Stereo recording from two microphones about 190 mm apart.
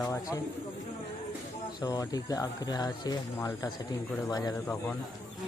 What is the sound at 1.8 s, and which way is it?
Speech, 20° left (ahead or behind).